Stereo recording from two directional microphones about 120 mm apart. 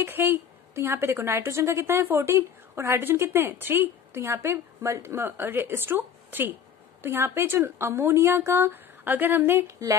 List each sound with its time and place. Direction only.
0.0 s a woman's voice: 20° right (ahead or behind)